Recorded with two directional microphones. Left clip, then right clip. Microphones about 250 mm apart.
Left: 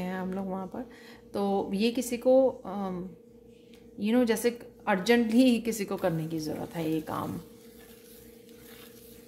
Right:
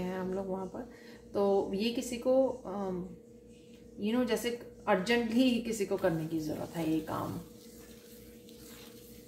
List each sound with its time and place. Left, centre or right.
0.0 s a sound: left
1.3 s a woman's voice: left
4.0 s a woman's voice: left